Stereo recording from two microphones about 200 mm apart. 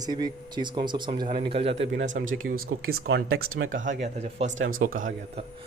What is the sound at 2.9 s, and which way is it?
Speech, 90° right.